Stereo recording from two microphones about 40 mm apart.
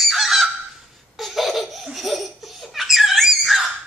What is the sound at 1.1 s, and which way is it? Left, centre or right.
Laughter, centre.